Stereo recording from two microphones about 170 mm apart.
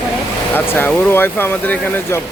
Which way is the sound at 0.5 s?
10° left (ahead or behind).